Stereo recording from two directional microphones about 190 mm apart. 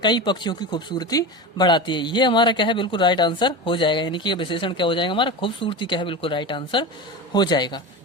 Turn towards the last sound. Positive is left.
turn(degrees=20)  # may be behind; listen again after turning